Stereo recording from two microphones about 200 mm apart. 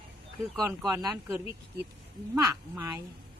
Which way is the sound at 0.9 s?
15° right (ahead or behind).